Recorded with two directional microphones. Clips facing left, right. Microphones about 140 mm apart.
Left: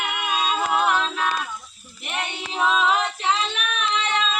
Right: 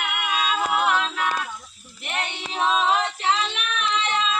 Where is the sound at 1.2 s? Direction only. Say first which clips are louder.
Left 1 dB; 10° left (ahead or behind).